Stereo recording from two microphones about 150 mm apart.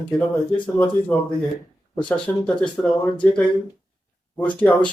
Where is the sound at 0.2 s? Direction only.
10° left (ahead or behind).